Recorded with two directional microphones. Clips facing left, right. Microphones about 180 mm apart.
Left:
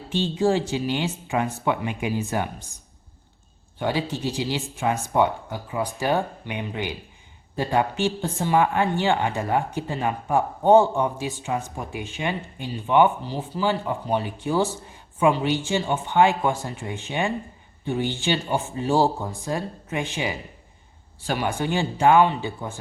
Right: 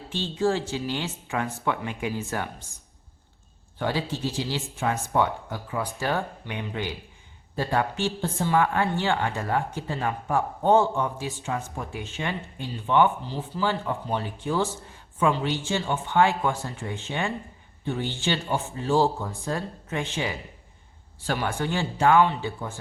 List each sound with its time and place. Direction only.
0.1 s a woman's voice: 15° left (ahead or behind)
3.8 s a woman's voice: 15° left (ahead or behind)